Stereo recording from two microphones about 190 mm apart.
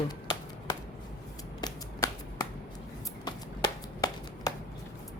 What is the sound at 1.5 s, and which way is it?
Shuffling cards, 20° left (ahead or behind).